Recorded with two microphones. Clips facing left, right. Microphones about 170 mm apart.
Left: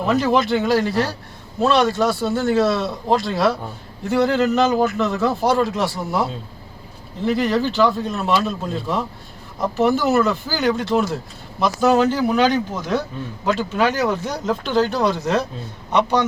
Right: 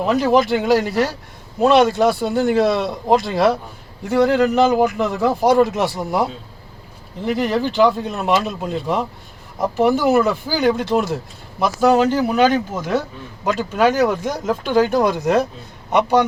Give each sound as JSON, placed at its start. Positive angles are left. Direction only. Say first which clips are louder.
{"t": 0.1, "sound": "a man's voice", "louder": "right 2 dB", "side_deg": -10}
{"t": 7.3, "sound": "a man's voice", "louder": "even", "side_deg": -10}
{"t": 16.0, "sound": "a man's voice", "louder": "right 3 dB", "side_deg": -15}